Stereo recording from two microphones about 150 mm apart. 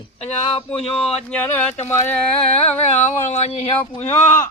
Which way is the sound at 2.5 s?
45° left (ahead or behind).